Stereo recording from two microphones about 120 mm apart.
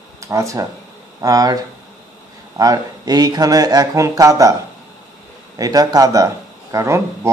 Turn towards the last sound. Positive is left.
turn(degrees=-25)  # may be behind; listen again after turning